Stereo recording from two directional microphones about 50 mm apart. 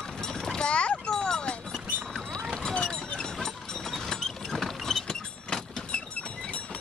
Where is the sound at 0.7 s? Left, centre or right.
Left.